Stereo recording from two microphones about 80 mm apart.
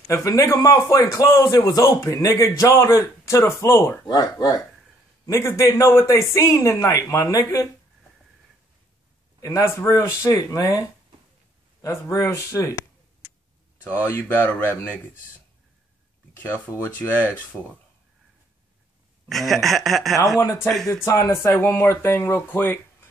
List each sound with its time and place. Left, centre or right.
0.1 s a man's voice: left
4.0 s speech: left
5.2 s a man's voice: left
9.4 s a man's voice: left
13.8 s speech: left
16.8 s speech: left
19.2 s speech: centre
21.0 s a man's voice: left